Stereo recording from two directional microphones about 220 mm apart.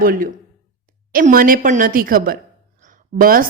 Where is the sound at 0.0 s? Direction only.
40° right (ahead or behind).